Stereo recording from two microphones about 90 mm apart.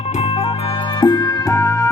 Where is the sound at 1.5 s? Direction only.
40° left (ahead or behind).